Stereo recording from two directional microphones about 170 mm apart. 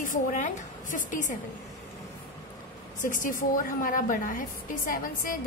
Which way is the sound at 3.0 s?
50° left (ahead or behind).